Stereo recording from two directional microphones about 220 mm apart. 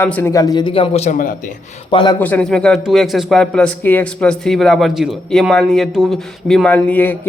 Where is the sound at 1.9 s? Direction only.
20° left (ahead or behind).